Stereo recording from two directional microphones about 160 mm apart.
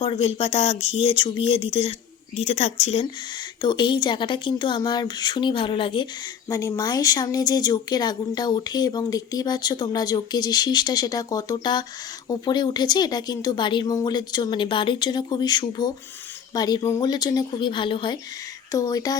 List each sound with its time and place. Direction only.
0.0 s a woman's voice: 35° left (ahead or behind)
3.6 s speech: 30° left (ahead or behind)
6.5 s speech: 20° left (ahead or behind)